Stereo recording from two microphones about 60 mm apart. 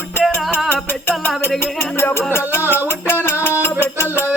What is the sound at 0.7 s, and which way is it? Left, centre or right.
Music, left.